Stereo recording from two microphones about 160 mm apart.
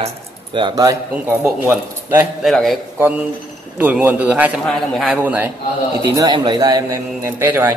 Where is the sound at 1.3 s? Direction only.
10° right (ahead or behind).